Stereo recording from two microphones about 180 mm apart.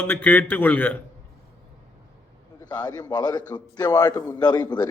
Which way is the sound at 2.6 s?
20° left (ahead or behind).